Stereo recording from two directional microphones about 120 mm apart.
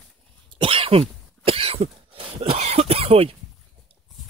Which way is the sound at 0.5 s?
50° right (ahead or behind).